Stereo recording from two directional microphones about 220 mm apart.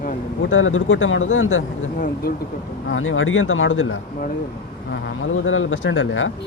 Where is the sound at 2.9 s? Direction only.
65° left (ahead or behind).